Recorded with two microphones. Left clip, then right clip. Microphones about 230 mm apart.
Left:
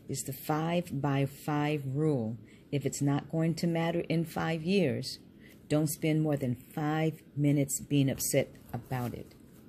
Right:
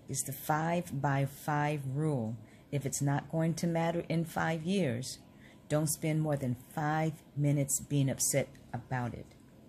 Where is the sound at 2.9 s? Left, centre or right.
Centre.